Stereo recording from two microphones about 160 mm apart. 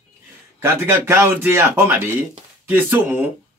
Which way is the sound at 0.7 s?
15° right (ahead or behind).